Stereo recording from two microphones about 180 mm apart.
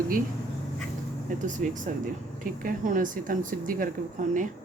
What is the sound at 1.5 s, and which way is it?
Speech, 45° right (ahead or behind).